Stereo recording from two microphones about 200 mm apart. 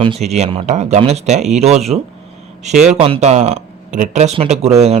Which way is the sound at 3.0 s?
30° right (ahead or behind).